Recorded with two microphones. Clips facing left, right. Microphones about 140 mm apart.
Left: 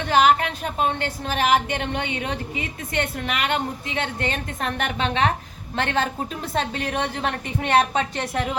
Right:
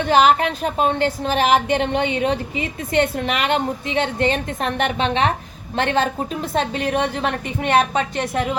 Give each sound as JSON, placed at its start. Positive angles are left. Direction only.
{"t": 0.0, "sound": "a woman's voice", "side_deg": -30}